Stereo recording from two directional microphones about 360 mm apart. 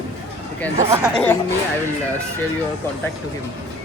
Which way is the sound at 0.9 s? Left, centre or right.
Centre.